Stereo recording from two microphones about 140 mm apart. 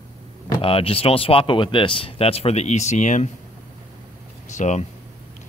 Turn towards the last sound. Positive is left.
turn(degrees=60)  # may be behind; listen again after turning